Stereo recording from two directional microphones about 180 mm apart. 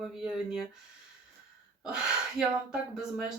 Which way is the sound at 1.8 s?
5° right (ahead or behind).